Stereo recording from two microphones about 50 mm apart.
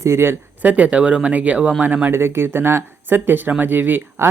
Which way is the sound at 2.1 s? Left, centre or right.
Right.